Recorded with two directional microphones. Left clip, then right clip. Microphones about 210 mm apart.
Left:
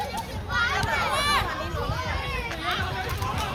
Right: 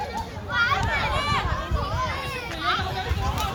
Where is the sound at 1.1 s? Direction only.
45° left (ahead or behind).